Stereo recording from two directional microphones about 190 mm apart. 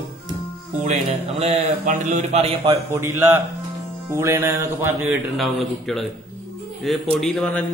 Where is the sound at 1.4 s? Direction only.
35° right (ahead or behind); by 3.3 s 15° right (ahead or behind).